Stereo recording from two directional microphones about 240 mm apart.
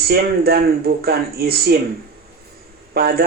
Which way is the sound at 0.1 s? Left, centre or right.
Right.